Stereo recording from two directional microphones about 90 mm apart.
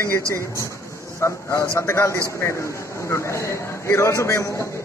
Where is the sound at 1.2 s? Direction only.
30° left (ahead or behind).